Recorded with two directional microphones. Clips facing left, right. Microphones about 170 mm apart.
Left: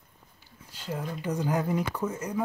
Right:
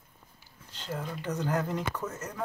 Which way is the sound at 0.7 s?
10° left (ahead or behind).